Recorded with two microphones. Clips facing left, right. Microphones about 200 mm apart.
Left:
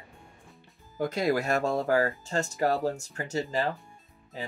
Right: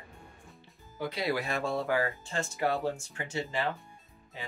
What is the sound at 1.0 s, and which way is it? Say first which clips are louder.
Speech: left 5 dB; 45° left (ahead or behind).